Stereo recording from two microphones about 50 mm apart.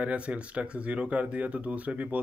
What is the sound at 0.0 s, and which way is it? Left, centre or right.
Speech, right.